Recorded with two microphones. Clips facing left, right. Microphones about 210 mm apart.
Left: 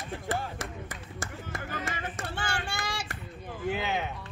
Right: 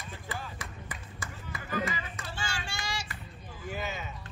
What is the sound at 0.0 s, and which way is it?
Music, 65° left (ahead or behind).